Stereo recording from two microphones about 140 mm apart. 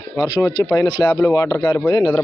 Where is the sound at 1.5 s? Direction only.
15° left (ahead or behind).